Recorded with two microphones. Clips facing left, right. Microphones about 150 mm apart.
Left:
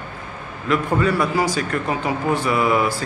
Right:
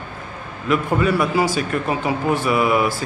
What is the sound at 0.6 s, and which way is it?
A man's voice, 20° right (ahead or behind).